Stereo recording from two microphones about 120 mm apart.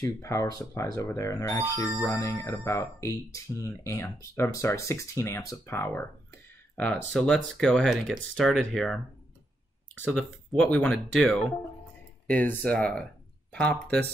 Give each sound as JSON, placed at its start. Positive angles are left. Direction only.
{"t": 0.0, "sound": "speech", "side_deg": 25}
{"t": 5.8, "sound": "a sound", "side_deg": 15}
{"t": 7.1, "sound": "speech", "side_deg": 5}
{"t": 10.1, "sound": "speech", "side_deg": 5}